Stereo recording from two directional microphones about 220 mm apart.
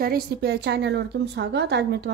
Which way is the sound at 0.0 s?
45° right (ahead or behind).